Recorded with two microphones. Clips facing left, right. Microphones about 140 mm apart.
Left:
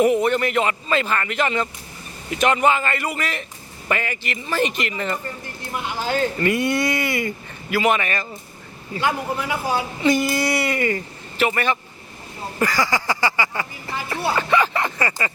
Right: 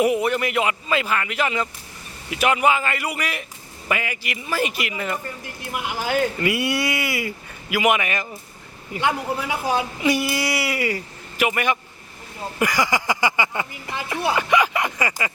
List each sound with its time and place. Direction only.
0.0 s speech: 10° right (ahead or behind)